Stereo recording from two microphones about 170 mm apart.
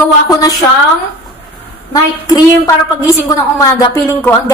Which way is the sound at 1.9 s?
20° left (ahead or behind).